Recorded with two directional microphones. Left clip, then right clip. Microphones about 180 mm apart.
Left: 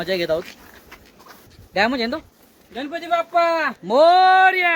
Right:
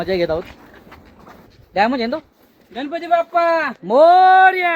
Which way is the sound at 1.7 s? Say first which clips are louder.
Right 3 dB; 10° left (ahead or behind).